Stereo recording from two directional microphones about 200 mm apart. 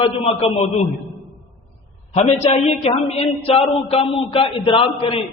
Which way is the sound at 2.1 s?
30° left (ahead or behind).